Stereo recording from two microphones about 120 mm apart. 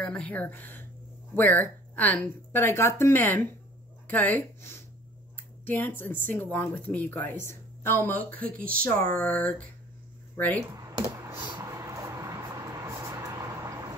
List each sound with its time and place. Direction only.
0.0 s speech: 10° left (ahead or behind)
10.8 s computer keyboard: 30° right (ahead or behind)
11.6 s vehicle: 25° right (ahead or behind)